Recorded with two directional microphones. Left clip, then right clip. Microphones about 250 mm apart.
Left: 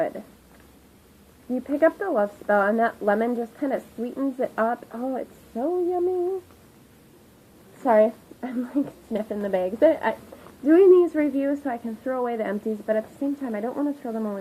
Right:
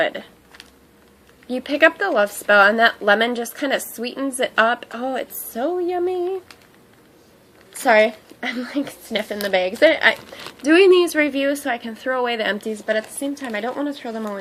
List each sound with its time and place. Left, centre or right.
1.5 s a woman's voice: right
7.9 s a woman's voice: centre